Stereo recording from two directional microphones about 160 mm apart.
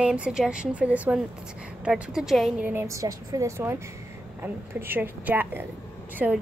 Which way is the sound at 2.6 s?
15° right (ahead or behind).